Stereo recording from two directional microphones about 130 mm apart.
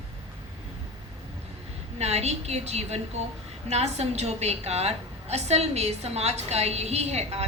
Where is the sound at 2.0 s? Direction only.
55° right (ahead or behind).